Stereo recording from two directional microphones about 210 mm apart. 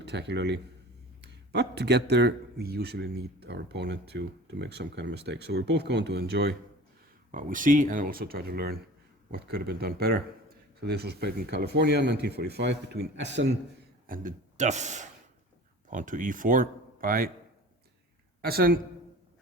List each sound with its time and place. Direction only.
0.0 s speech: 55° right (ahead or behind)
7.3 s speech: 40° right (ahead or behind); by 13.5 s 55° right (ahead or behind)
14.1 s speech: 40° right (ahead or behind)
18.4 s speech: 45° right (ahead or behind)